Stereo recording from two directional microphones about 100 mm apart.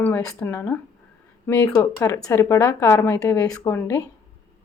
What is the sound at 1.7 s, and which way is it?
Speech, 35° left (ahead or behind).